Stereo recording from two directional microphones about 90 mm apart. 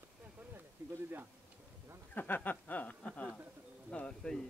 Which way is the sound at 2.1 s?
20° left (ahead or behind).